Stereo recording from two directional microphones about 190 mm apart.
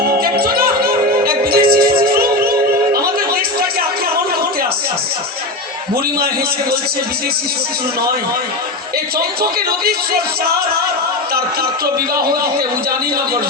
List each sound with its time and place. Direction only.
0.2 s music: 50° right (ahead or behind)
9.1 s speech: 55° right (ahead or behind)